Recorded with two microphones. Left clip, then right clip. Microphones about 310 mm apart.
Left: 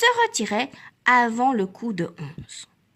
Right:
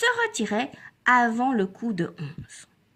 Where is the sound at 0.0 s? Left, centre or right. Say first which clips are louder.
Left 4 dB; centre.